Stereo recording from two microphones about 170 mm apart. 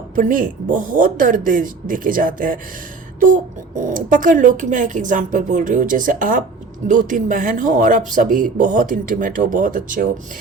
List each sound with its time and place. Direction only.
0.2 s speech: 50° right (ahead or behind)
3.8 s speech: 50° right (ahead or behind)